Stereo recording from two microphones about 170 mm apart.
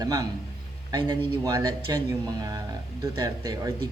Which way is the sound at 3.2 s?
20° right (ahead or behind).